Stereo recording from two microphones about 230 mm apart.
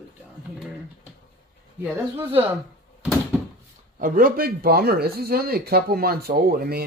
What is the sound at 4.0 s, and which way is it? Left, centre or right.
Speech, right.